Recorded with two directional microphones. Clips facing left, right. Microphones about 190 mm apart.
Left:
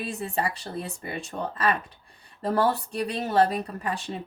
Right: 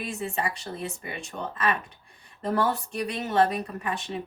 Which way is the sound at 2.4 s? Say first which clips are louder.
Left 2 dB; 35° left (ahead or behind).